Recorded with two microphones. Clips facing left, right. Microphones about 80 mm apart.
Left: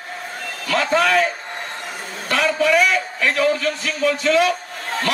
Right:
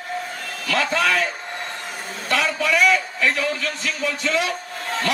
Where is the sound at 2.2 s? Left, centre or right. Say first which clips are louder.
Left 4 dB; left.